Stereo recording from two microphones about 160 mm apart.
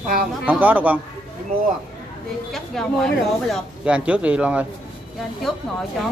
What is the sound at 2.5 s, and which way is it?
Speech, centre (ahead or behind).